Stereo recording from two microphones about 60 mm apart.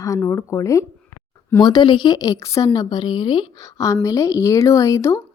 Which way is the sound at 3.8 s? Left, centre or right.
Left.